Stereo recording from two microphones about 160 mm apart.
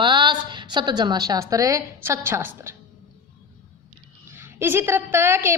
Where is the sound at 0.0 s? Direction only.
30° right (ahead or behind).